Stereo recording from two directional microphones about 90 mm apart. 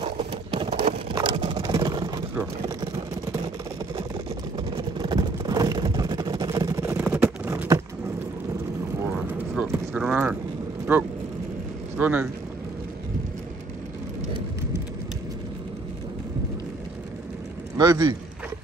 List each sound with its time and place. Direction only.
0.7 s vehicle: 55° right (ahead or behind)
4.6 s vehicle: 65° right (ahead or behind); by 6.9 s 40° right (ahead or behind)
6.9 s a sound: 20° right (ahead or behind)
9.6 s clip-clop: 15° right (ahead or behind)
9.9 s vehicle: 15° right (ahead or behind)
10.9 s speech: 25° right (ahead or behind)
17.7 s a sound: 50° right (ahead or behind)